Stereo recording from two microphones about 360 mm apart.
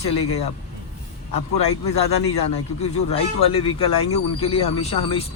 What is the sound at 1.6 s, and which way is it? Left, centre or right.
Speech, centre.